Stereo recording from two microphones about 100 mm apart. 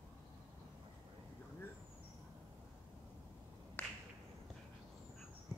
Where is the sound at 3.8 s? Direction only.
20° left (ahead or behind).